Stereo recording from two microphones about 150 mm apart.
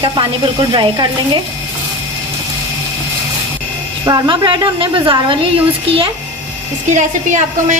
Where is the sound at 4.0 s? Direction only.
30° right (ahead or behind).